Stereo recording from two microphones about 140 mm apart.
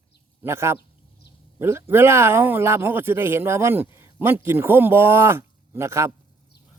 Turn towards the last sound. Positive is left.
turn(degrees=-20)  # may be behind; listen again after turning